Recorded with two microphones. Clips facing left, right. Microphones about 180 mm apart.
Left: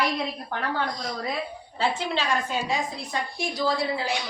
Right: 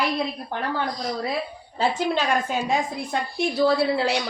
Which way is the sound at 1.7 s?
40° right (ahead or behind).